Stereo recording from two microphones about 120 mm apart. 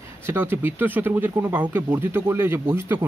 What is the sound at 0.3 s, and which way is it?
Speech, 20° right (ahead or behind).